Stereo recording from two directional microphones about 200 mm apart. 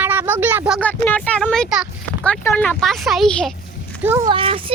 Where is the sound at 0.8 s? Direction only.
10° left (ahead or behind).